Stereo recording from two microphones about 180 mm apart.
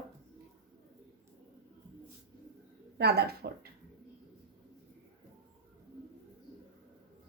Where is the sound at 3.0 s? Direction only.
60° right (ahead or behind).